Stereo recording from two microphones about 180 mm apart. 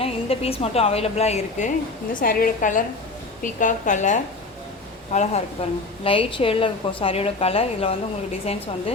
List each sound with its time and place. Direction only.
0.0 s a woman's voice: 35° left (ahead or behind)
2.1 s a woman's voice: 55° left (ahead or behind); by 8.6 s 35° left (ahead or behind)